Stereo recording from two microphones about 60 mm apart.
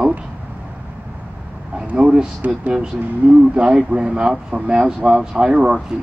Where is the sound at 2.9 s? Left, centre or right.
Right.